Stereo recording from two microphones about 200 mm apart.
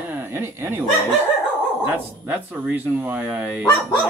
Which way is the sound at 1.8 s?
10° right (ahead or behind).